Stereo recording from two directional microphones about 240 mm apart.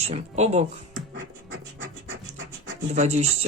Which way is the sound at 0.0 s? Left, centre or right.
Right.